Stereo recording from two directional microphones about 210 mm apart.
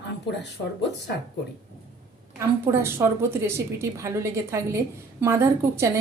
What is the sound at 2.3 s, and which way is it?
A woman's voice, 10° right (ahead or behind).